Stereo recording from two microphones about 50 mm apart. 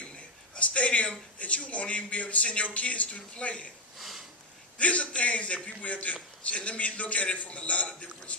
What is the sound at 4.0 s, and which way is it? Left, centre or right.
Sniff, centre.